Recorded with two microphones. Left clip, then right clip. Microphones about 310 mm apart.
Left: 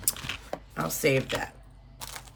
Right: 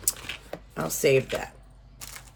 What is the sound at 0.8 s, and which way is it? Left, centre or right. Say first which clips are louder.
Speech: right 3 dB; centre.